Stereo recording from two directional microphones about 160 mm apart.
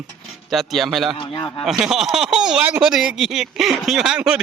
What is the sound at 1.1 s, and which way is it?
Speech, 25° left (ahead or behind).